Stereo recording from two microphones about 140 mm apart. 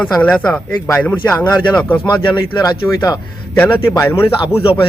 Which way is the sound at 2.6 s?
25° left (ahead or behind).